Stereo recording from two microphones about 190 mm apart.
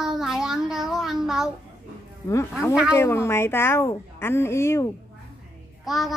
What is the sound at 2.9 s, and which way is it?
A woman's voice, 15° left (ahead or behind).